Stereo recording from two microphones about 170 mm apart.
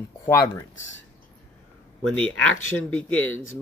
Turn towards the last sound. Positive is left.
turn(degrees=10)  # may be behind; listen again after turning